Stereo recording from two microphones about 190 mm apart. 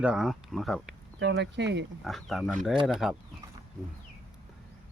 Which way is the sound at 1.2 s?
70° right (ahead or behind).